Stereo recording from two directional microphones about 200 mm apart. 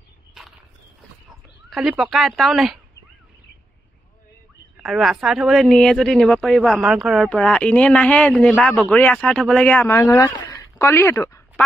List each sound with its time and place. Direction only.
1.3 s speech: 5° right (ahead or behind)
4.7 s speech: 5° right (ahead or behind); by 11.6 s 15° left (ahead or behind)